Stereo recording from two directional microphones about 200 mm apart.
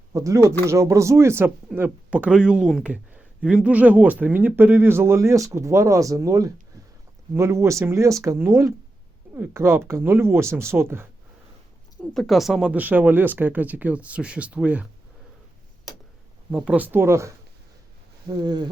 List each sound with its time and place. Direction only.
0.1 s speech: 15° right (ahead or behind)
12.1 s speech: centre (ahead or behind)
15.9 s tick-tock: 20° left (ahead or behind)
16.5 s speech: 5° right (ahead or behind)